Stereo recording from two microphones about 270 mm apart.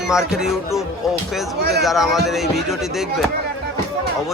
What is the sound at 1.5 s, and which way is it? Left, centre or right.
Speech, right.